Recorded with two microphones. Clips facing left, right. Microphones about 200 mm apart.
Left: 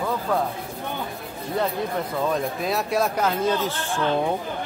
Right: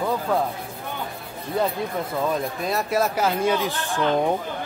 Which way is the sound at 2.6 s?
Centre (ahead or behind).